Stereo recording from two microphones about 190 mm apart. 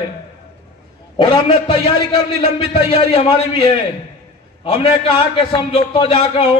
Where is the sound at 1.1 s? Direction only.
25° left (ahead or behind).